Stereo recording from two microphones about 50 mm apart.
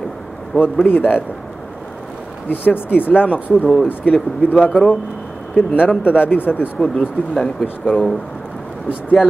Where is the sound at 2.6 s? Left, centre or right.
Left.